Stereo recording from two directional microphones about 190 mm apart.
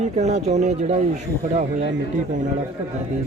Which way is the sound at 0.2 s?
35° right (ahead or behind).